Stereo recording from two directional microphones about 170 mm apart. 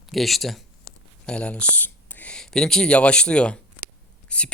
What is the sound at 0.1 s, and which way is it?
Speech, centre (ahead or behind).